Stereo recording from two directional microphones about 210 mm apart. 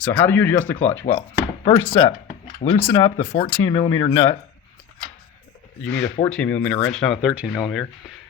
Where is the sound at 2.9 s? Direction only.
25° left (ahead or behind).